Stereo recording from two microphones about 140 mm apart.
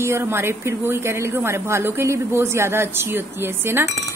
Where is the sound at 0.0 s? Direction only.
20° right (ahead or behind).